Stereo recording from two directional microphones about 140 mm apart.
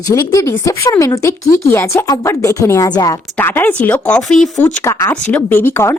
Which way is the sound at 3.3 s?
15° left (ahead or behind).